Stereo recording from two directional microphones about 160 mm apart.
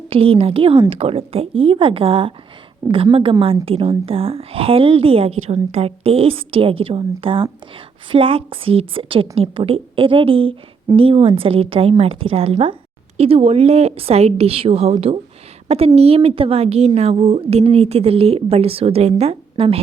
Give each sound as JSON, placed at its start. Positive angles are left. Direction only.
{"t": 0.1, "sound": "a woman's voice", "side_deg": -35}